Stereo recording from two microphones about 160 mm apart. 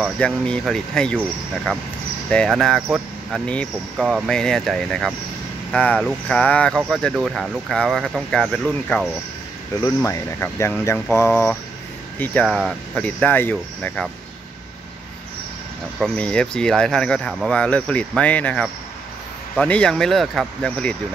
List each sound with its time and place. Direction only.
0.0 s speech: 5° left (ahead or behind)
16.0 s speech: 5° left (ahead or behind)